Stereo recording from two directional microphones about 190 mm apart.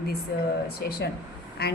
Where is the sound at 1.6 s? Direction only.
55° left (ahead or behind).